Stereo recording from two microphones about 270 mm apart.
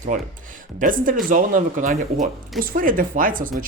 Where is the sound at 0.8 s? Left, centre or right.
Right.